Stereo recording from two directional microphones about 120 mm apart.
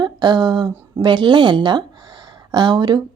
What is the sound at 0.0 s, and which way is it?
Speech, 35° right (ahead or behind).